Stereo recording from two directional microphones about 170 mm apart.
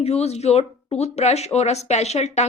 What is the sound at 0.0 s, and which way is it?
Speech, 40° left (ahead or behind).